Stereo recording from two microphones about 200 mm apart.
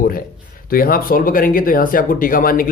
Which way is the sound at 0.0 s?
45° left (ahead or behind).